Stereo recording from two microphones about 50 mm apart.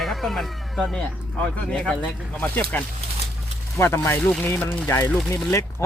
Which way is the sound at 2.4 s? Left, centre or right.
Left.